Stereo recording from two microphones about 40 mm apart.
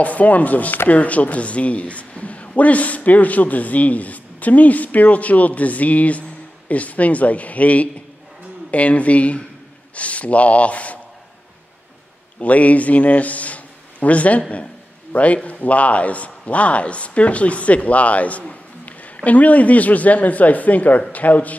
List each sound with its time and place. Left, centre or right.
0.0 s a man's voice: left
12.4 s a man's voice: left